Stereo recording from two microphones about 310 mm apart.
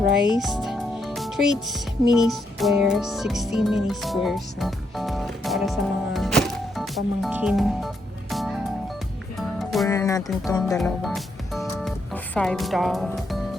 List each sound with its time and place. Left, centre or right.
0.3 s speech: centre
6.1 s music: centre
9.8 s speech: centre